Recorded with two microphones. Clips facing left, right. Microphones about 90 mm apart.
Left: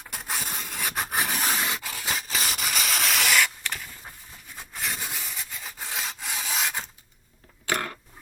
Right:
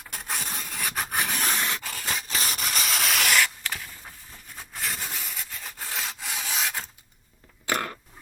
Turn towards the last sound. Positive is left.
turn(degrees=-30)  # may be behind; listen again after turning